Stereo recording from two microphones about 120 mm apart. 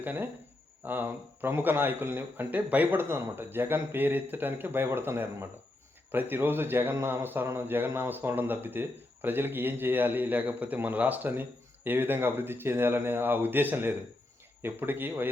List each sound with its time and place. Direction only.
0.0 s speech: 15° right (ahead or behind)